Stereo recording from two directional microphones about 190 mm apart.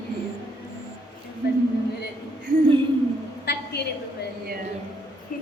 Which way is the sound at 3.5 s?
60° left (ahead or behind).